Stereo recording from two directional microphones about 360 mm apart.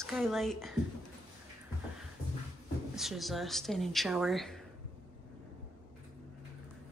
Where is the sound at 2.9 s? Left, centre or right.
Centre.